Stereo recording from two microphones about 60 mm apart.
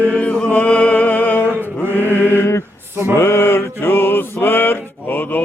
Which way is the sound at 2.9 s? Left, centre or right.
Right.